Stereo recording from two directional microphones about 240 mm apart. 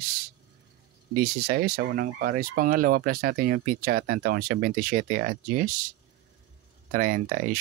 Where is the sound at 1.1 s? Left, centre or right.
Right.